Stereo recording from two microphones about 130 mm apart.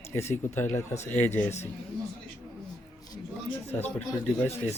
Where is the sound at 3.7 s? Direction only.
10° left (ahead or behind).